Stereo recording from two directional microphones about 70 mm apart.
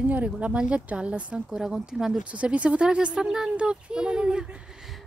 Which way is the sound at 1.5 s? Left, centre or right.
Centre.